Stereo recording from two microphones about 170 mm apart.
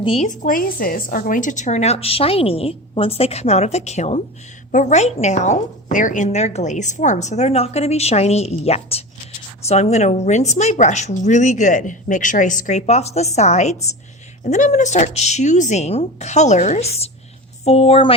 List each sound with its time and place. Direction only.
0.0 s a woman's voice: 35° left (ahead or behind)
0.3 s a woman's voice: 55° left (ahead or behind); by 18.1 s 35° left (ahead or behind)